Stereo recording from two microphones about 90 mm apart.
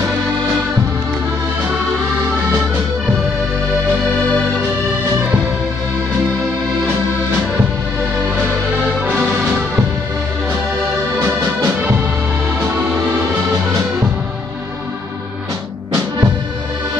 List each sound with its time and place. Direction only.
9.0 s music: 15° right (ahead or behind)
11.2 s music: 25° right (ahead or behind)